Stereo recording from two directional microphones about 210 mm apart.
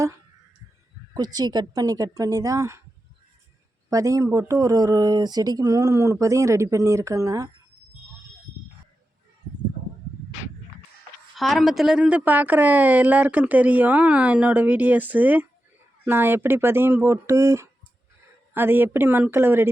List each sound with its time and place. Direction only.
1.1 s a woman's voice: 20° right (ahead or behind)
3.8 s a woman's voice: 15° right (ahead or behind)
11.3 s a woman's voice: centre (ahead or behind)